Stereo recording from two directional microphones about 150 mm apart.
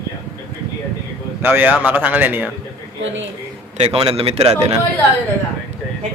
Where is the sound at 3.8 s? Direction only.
45° right (ahead or behind).